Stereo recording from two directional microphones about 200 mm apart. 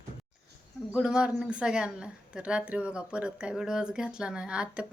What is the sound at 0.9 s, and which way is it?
Speech, 5° right (ahead or behind).